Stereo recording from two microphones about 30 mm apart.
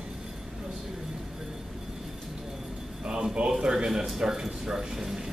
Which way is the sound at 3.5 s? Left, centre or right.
Right.